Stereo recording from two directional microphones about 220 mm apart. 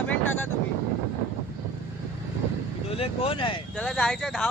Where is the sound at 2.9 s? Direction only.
25° left (ahead or behind).